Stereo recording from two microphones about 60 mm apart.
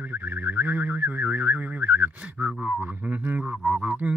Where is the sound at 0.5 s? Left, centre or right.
Right.